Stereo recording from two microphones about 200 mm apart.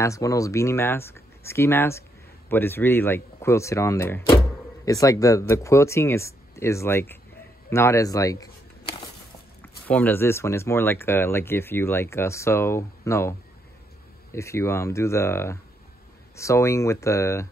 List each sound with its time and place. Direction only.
0.0 s speech: 15° left (ahead or behind)
9.6 s speech: 10° left (ahead or behind)
14.3 s speech: 15° left (ahead or behind)